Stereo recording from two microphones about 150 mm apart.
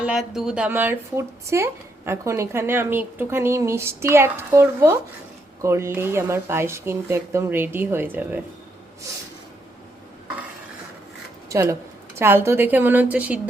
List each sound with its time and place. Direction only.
0.0 s speech: 5° right (ahead or behind)
11.4 s a woman's voice: 20° right (ahead or behind)